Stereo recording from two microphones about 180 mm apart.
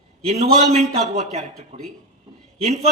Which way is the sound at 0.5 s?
40° right (ahead or behind).